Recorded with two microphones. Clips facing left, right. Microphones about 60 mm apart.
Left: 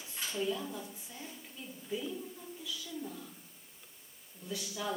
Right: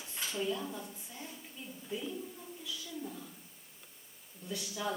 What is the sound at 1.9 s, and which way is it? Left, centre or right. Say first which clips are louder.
Speech: left 2 dB; centre.